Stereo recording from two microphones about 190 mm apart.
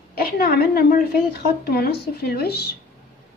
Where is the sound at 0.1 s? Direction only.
50° left (ahead or behind).